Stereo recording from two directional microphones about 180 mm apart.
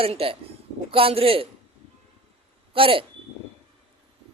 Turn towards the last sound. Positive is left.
turn(degrees=-30)  # may be behind; listen again after turning